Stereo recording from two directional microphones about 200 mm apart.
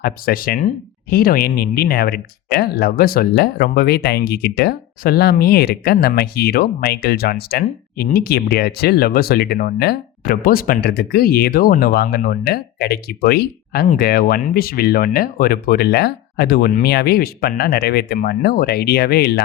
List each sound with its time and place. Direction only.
0.0 s speech: 50° left (ahead or behind)